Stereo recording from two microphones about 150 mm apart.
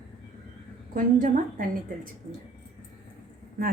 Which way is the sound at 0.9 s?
60° right (ahead or behind).